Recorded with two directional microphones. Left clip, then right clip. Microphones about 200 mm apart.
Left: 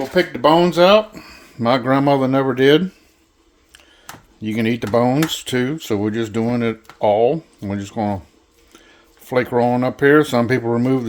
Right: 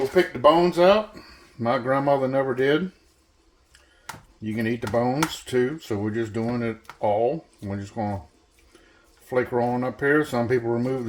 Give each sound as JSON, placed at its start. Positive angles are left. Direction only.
{"t": 0.1, "sound": "speech", "side_deg": 55}
{"t": 4.4, "sound": "speech", "side_deg": 50}
{"t": 9.2, "sound": "speech", "side_deg": 50}